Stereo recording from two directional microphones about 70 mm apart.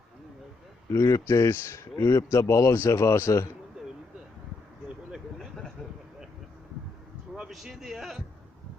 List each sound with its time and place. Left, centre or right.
0.9 s a man's voice: left
5.4 s vehicle: centre
7.5 s a sound: centre